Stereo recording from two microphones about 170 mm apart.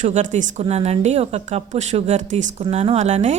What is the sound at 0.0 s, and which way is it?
A woman's voice, 45° right (ahead or behind).